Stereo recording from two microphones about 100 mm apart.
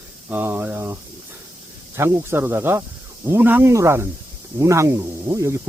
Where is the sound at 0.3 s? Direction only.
20° right (ahead or behind).